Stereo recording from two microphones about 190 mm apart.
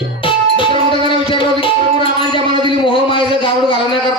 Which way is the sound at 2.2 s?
25° right (ahead or behind).